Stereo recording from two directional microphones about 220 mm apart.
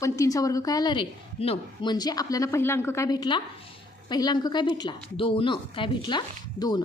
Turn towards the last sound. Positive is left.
turn(degrees=20)  # may be behind; listen again after turning